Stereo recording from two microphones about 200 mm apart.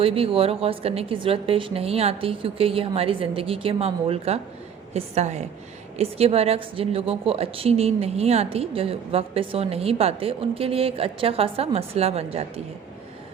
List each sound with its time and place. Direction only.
0.0 s a woman's voice: 30° right (ahead or behind)